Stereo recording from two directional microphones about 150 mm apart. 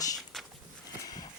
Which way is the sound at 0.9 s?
25° left (ahead or behind).